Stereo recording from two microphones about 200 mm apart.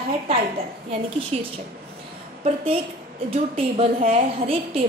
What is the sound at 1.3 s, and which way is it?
Speech, 30° right (ahead or behind).